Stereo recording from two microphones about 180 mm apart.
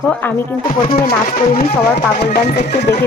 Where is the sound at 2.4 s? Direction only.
40° left (ahead or behind).